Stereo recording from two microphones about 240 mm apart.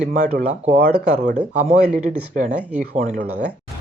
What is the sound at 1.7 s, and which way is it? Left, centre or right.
Speech, right.